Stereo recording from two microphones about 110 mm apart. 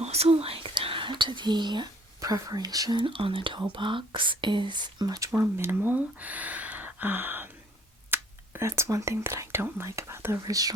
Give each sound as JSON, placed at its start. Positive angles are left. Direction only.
{"t": 0.0, "sound": "speech", "side_deg": -70}
{"t": 3.0, "sound": "speech", "side_deg": -55}
{"t": 5.3, "sound": "speech", "side_deg": -25}